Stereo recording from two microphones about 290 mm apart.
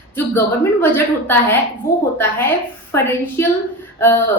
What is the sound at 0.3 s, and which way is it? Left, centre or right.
A woman's voice, centre.